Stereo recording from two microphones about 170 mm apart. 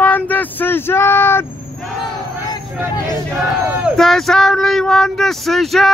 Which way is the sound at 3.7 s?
Centre (ahead or behind).